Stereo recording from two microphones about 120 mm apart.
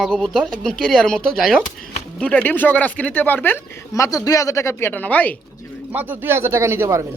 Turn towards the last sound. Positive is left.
turn(degrees=-25)  # may be behind; listen again after turning